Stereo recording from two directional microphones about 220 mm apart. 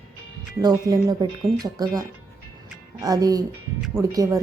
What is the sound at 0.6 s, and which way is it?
Speech, 15° right (ahead or behind).